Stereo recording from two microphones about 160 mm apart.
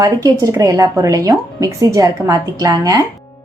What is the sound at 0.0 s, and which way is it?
Speech, 20° right (ahead or behind).